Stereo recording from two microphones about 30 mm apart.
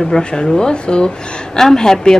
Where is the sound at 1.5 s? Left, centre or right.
Centre.